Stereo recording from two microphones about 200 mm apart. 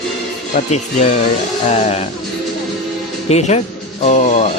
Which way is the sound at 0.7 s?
35° left (ahead or behind).